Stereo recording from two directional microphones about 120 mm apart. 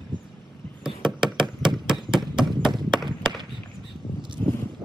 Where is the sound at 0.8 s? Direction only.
5° right (ahead or behind).